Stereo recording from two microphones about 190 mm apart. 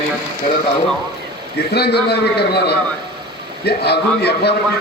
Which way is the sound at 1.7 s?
60° left (ahead or behind).